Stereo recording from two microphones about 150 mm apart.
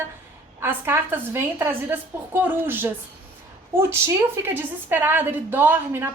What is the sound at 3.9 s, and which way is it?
A woman's voice, 15° right (ahead or behind).